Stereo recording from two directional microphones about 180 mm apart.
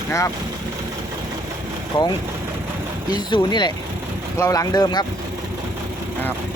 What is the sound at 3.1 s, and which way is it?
Speech, 25° left (ahead or behind).